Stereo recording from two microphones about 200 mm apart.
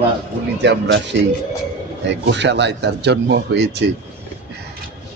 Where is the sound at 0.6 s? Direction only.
60° right (ahead or behind).